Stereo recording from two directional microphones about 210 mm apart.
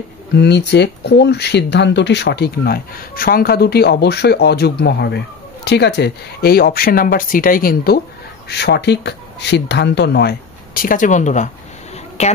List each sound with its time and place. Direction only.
0.3 s a woman's voice: 55° left (ahead or behind); by 12.3 s 30° left (ahead or behind)